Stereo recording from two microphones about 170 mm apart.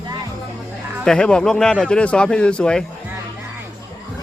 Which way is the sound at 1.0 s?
5° left (ahead or behind).